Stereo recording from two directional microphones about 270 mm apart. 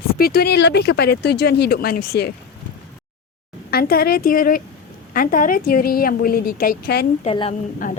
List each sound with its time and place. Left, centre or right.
0.2 s a woman's voice: left
3.7 s a woman's voice: left
7.3 s a woman's voice: left